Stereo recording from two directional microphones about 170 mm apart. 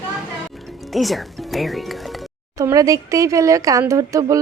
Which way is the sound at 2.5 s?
20° right (ahead or behind).